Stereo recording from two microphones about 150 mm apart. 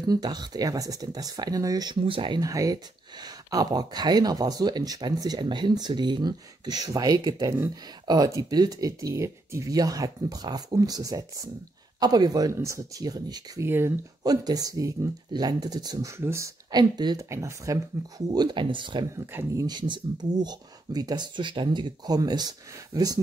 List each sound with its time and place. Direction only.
0.0 s speech: 25° right (ahead or behind)
19.1 s speech: 20° right (ahead or behind)